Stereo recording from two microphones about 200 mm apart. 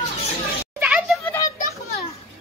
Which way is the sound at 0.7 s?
5° right (ahead or behind).